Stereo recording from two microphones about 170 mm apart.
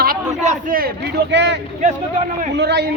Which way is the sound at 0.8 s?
70° right (ahead or behind).